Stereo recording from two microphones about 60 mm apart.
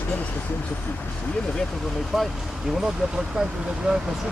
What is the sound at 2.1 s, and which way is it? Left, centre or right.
Speech, centre.